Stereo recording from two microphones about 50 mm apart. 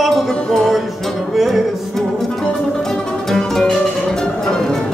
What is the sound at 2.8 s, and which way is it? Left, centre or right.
Music, centre.